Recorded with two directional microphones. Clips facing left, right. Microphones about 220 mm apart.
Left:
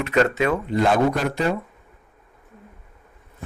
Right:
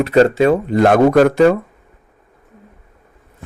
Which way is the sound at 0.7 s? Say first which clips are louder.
Right 9 dB; 65° right (ahead or behind).